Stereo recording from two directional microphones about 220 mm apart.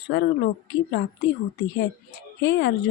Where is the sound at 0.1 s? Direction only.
50° left (ahead or behind).